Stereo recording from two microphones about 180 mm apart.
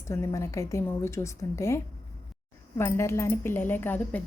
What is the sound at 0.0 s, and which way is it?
Speech, 15° left (ahead or behind).